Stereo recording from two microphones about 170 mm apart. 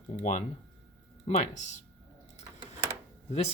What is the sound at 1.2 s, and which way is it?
Speech, 40° left (ahead or behind).